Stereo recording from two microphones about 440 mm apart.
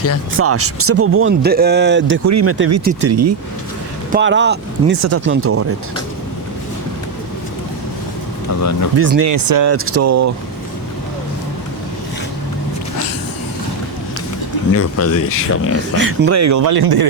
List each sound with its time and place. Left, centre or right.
0.3 s speech: right
4.1 s speech: right
9.0 s speech: right
9.3 s speech: right
9.7 s speech: right
14.7 s speech: left
16.0 s speech: right
16.7 s speech: right